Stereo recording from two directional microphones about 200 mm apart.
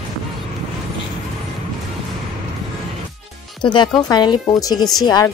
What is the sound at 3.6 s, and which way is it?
A woman's voice, 25° left (ahead or behind).